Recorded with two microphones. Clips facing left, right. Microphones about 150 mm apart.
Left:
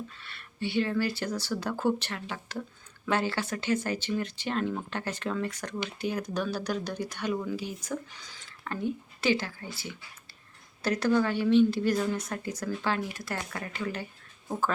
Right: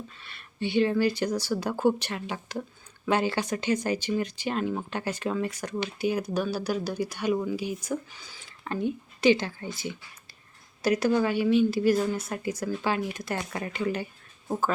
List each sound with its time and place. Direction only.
0.2 s a woman's voice: 15° right (ahead or behind)
8.6 s a woman's voice: 20° right (ahead or behind)